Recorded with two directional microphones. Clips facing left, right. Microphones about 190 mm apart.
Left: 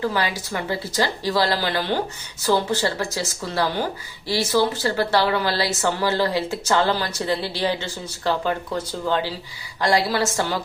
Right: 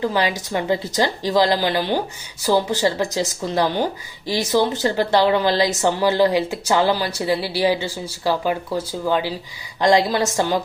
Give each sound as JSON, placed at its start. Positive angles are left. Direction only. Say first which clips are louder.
{"t": 0.0, "sound": "a woman's voice", "louder": "right 3 dB", "side_deg": -20}